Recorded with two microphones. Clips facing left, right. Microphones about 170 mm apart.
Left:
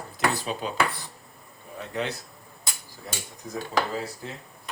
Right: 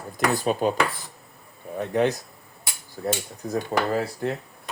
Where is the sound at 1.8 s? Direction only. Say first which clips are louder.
Right 9 dB; 50° right (ahead or behind).